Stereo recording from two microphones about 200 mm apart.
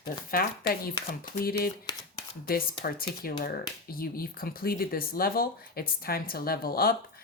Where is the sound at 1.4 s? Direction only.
50° left (ahead or behind).